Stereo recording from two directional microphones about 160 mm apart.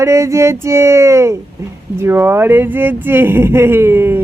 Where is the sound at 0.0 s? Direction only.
20° right (ahead or behind).